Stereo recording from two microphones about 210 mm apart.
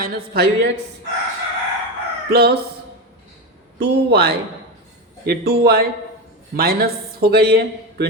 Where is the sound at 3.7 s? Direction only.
50° right (ahead or behind).